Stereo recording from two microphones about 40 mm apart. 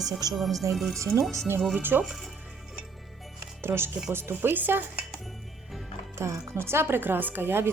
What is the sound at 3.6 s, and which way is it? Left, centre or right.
Speech, right.